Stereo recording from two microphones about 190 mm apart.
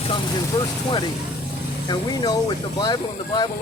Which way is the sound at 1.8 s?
20° left (ahead or behind).